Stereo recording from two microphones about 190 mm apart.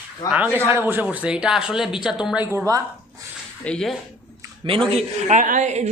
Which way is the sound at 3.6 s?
5° left (ahead or behind).